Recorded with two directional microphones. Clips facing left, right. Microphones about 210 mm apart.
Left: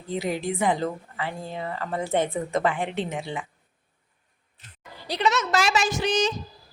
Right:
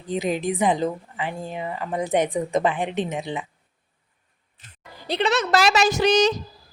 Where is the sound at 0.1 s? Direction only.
20° right (ahead or behind).